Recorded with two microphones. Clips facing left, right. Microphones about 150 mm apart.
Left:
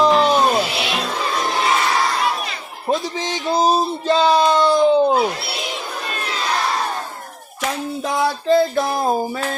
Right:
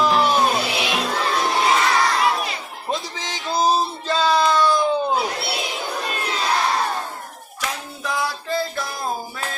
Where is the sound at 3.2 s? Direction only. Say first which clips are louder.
Left 2 dB; 15° left (ahead or behind).